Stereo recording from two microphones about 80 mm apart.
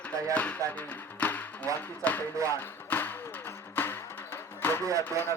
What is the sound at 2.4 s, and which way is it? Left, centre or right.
Music, left.